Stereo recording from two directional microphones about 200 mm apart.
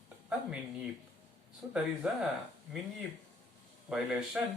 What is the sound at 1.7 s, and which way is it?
Speech, 5° right (ahead or behind).